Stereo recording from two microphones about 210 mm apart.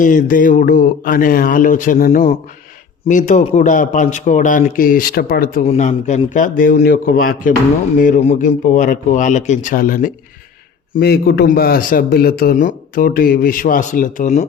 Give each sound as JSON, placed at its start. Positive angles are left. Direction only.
{"t": 0.0, "sound": "a man's voice", "side_deg": 40}
{"t": 5.6, "sound": "a man's voice", "side_deg": 35}